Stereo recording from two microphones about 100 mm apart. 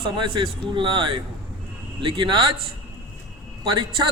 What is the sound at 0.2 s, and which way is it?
Speech, 55° right (ahead or behind).